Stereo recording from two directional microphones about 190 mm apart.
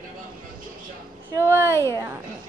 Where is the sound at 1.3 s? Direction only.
15° right (ahead or behind).